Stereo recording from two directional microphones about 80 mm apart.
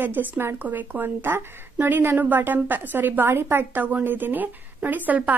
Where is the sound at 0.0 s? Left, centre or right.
Right.